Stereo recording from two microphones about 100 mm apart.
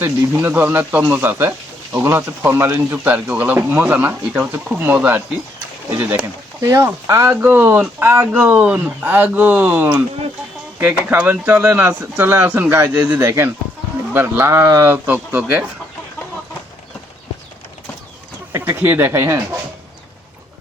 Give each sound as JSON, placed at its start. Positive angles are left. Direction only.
{"t": 0.0, "sound": "speech", "side_deg": -20}
{"t": 8.3, "sound": "speech", "side_deg": -10}
{"t": 18.6, "sound": "speech", "side_deg": -20}